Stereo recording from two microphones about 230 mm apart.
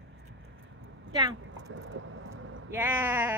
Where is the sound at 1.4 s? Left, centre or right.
Right.